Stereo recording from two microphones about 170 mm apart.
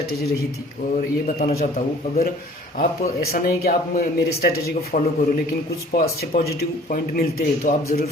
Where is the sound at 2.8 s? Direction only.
60° left (ahead or behind).